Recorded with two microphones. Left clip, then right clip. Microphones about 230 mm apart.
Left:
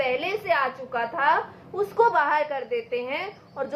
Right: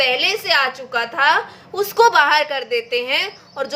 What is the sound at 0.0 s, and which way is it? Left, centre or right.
A woman's voice, right.